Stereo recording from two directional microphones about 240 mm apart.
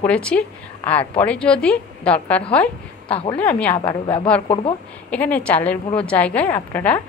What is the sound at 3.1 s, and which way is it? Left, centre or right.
Speech, left.